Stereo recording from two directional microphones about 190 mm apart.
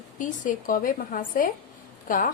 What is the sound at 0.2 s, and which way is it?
A woman's voice, 45° left (ahead or behind).